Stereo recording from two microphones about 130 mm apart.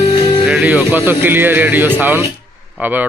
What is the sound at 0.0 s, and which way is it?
Music, 40° left (ahead or behind).